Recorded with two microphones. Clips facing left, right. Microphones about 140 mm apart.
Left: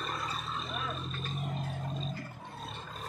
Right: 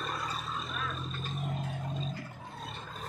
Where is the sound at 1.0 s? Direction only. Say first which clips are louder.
Even; centre (ahead or behind).